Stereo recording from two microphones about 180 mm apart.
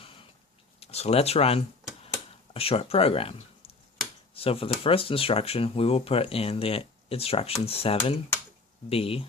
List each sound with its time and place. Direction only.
0.8 s speech: 35° left (ahead or behind)